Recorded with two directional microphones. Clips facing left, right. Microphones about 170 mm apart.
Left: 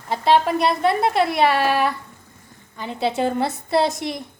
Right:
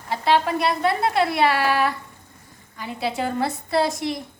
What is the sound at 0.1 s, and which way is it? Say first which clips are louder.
A woman's voice: left 3 dB; 20° left (ahead or behind).